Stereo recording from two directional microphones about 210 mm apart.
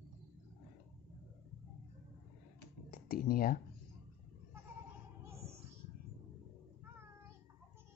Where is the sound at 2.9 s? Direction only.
45° left (ahead or behind).